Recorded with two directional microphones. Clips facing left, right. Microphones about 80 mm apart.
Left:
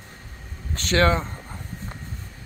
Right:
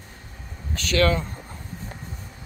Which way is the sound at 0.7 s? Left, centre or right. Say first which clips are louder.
Left 1 dB; left.